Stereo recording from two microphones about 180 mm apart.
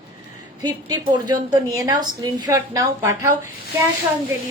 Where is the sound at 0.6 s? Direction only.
20° right (ahead or behind).